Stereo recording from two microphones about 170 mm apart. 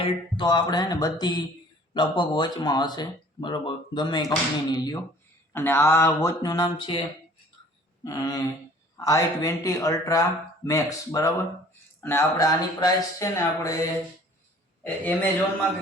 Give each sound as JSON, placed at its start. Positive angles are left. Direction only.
{"t": 0.0, "sound": "speech", "side_deg": 25}
{"t": 8.0, "sound": "speech", "side_deg": 20}
{"t": 14.8, "sound": "speech", "side_deg": 10}